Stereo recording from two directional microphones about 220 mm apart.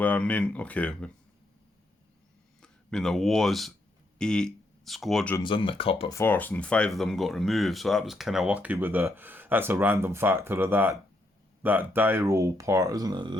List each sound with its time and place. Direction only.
0.0 s speech: 5° left (ahead or behind)
2.6 s speech: 5° left (ahead or behind)
5.4 s speech: 25° left (ahead or behind)
6.1 s speech: 10° left (ahead or behind); by 13.3 s 20° right (ahead or behind)